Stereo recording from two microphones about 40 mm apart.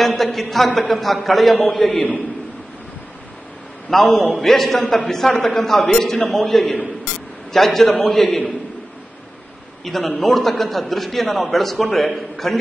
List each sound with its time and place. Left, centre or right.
0.0 s a man's voice: centre
3.9 s a man's voice: centre
4.7 s a man's voice: centre
9.8 s a man's voice: centre